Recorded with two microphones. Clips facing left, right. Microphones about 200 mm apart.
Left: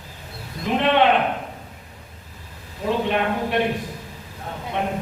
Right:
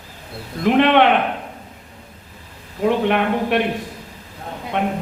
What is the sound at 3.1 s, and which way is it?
Speech, 65° right (ahead or behind).